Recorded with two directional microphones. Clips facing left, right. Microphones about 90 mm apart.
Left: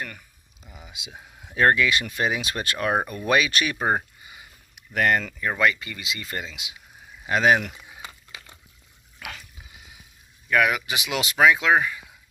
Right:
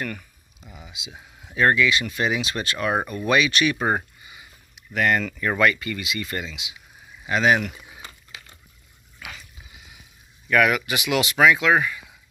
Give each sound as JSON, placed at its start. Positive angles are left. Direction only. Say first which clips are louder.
{"t": 1.5, "sound": "speech", "louder": "even", "side_deg": 40}
{"t": 2.2, "sound": "speech", "louder": "right 1 dB", "side_deg": 40}
{"t": 3.7, "sound": "speech", "louder": "even", "side_deg": 25}
{"t": 4.9, "sound": "speech", "louder": "even", "side_deg": 35}
{"t": 5.5, "sound": "speech", "louder": "right 2 dB", "side_deg": 20}
{"t": 9.2, "sound": "a sound", "louder": "left 2 dB", "side_deg": 60}
{"t": 10.5, "sound": "speech", "louder": "right 2 dB", "side_deg": 20}